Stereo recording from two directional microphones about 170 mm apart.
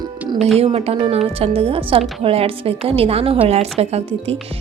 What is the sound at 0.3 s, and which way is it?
Speech, centre (ahead or behind).